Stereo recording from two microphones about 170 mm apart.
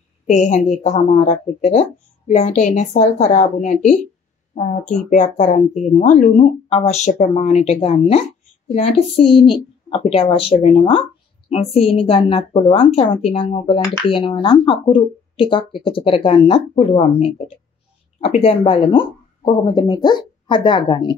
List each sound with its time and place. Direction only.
0.3 s a woman's voice: 45° left (ahead or behind); by 21.1 s 25° left (ahead or behind)